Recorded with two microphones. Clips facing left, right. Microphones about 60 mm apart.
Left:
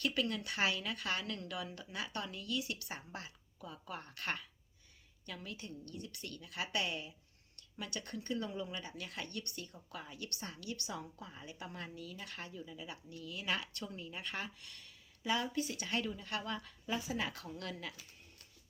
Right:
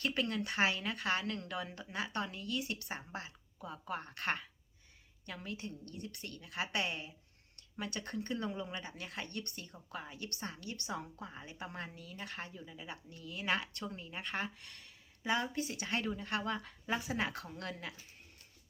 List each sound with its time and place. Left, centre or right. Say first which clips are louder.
0.0 s speech: right 1 dB; right
3.6 s speech: right 5 dB; right